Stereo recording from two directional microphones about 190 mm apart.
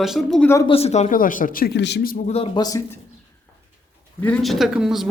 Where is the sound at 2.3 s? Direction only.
25° left (ahead or behind).